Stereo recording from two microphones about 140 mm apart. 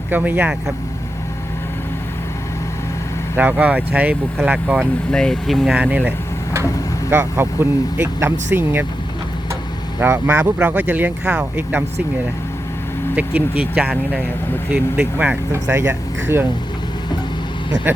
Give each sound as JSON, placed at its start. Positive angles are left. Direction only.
{"t": 0.1, "sound": "speech", "side_deg": -15}
{"t": 3.3, "sound": "speech", "side_deg": -10}
{"t": 5.1, "sound": "speech", "side_deg": 5}
{"t": 5.7, "sound": "speech", "side_deg": -10}
{"t": 10.0, "sound": "speech", "side_deg": -15}
{"t": 13.1, "sound": "speech", "side_deg": -10}